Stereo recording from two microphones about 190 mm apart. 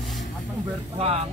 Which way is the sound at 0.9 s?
35° right (ahead or behind).